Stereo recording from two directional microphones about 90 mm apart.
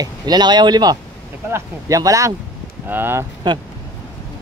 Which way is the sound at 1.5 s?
40° right (ahead or behind).